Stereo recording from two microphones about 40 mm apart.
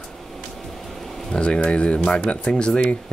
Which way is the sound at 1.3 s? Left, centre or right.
Left.